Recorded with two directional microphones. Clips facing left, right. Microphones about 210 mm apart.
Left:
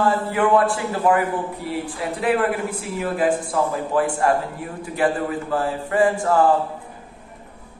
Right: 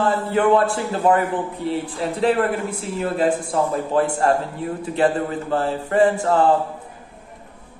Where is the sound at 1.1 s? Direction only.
25° right (ahead or behind).